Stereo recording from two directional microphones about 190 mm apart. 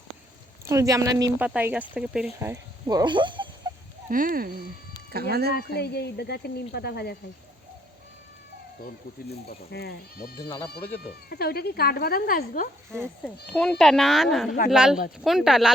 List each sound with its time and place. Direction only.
0.6 s speech: 15° right (ahead or behind)
4.1 s speech: 50° right (ahead or behind)
5.5 s speech: 60° left (ahead or behind)
9.5 s speech: 55° left (ahead or behind)
13.5 s speech: 5° left (ahead or behind)